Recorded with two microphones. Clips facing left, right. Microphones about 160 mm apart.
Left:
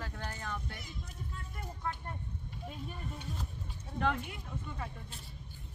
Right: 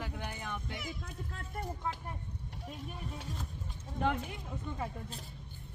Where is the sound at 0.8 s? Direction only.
90° right.